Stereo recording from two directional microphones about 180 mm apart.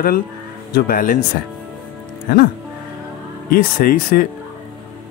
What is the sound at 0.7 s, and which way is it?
Speech, 50° left (ahead or behind).